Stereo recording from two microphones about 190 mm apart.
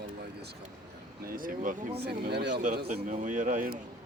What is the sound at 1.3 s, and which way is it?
Speech, 45° right (ahead or behind).